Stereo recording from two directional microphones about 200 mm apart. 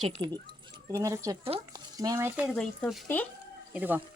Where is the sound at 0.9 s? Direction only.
15° right (ahead or behind).